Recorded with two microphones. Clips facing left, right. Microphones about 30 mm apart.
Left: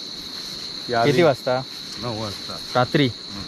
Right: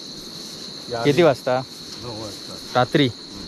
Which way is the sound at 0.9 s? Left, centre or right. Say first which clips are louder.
Even; left.